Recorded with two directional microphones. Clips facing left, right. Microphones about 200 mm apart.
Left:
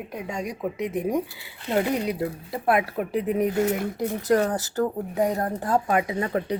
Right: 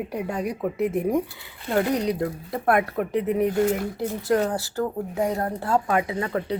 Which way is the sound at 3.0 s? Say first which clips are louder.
Right 1 dB; 15° left (ahead or behind).